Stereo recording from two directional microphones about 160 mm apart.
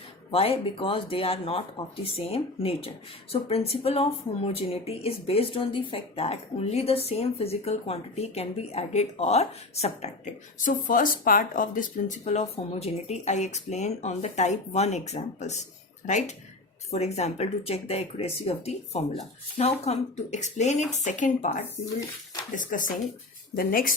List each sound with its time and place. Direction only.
0.3 s speech: 35° left (ahead or behind); by 23.9 s 65° left (ahead or behind)